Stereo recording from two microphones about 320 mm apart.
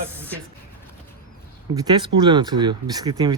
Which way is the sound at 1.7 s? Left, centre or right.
Centre.